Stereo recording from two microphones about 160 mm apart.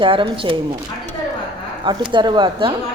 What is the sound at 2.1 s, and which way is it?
Speech, 30° right (ahead or behind).